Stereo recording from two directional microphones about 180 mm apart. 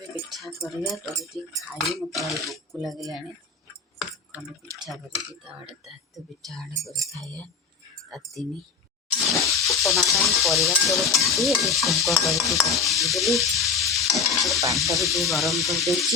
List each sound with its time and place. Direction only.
0.3 s a sound: centre (ahead or behind)
1.2 s stir: centre (ahead or behind)
4.8 s speech: centre (ahead or behind)
5.8 s stir: centre (ahead or behind)
8.1 s stir: centre (ahead or behind)
9.6 s stir: centre (ahead or behind)
14.6 s stir: 15° right (ahead or behind)
14.9 s stir: centre (ahead or behind)